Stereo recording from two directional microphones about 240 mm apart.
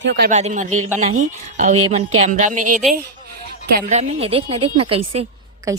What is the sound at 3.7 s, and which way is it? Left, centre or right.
A woman's voice, right.